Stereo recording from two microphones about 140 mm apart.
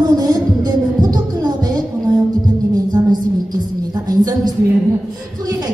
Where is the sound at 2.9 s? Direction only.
30° right (ahead or behind).